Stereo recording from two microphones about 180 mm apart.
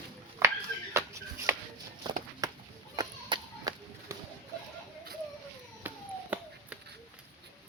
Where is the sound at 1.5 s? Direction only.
15° right (ahead or behind).